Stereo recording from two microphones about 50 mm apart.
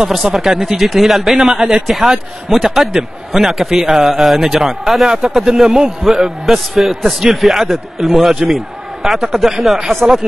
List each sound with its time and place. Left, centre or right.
0.1 s a man's voice: centre
10.0 s speech: right